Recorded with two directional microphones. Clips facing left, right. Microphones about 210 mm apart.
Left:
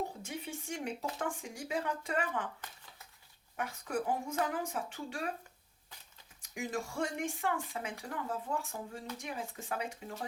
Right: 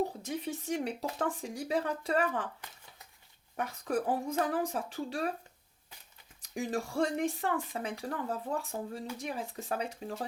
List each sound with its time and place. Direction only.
0.3 s speech: 40° right (ahead or behind)
3.6 s speech: 35° right (ahead or behind)
6.4 s speech: 35° right (ahead or behind)